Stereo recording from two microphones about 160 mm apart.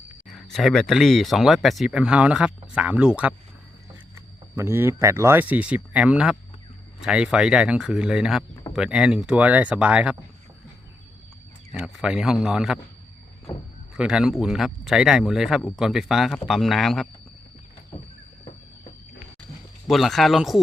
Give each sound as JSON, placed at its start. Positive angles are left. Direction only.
{"t": 0.3, "sound": "speech", "side_deg": 0}
{"t": 4.5, "sound": "speech", "side_deg": -15}
{"t": 11.7, "sound": "speech", "side_deg": 0}
{"t": 13.9, "sound": "speech", "side_deg": -5}
{"t": 19.9, "sound": "speech", "side_deg": 0}